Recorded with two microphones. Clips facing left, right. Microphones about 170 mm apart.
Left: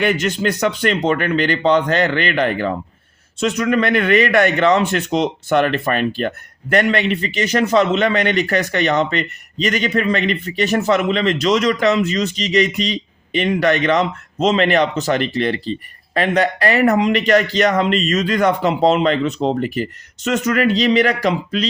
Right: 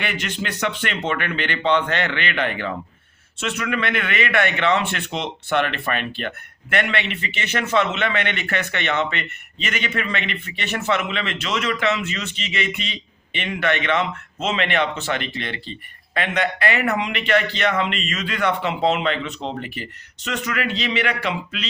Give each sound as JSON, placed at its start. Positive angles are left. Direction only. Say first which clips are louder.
{"t": 0.0, "sound": "a man's voice", "louder": "left 10 dB", "side_deg": 40}